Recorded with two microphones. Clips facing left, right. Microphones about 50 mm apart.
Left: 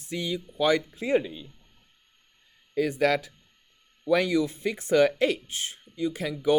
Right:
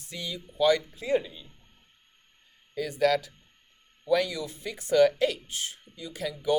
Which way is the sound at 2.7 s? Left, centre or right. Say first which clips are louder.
Left 1 dB; left.